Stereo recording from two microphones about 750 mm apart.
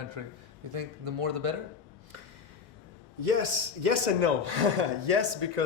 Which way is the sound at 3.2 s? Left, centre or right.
Right.